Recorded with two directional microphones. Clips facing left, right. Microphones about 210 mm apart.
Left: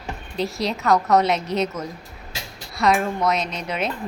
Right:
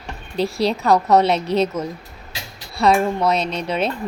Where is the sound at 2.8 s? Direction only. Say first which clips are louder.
Right 3 dB; 30° right (ahead or behind).